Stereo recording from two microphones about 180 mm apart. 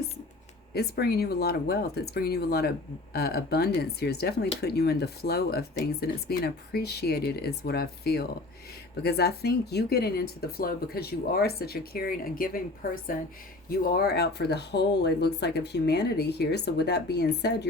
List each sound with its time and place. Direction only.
0.7 s speech: 60° left (ahead or behind)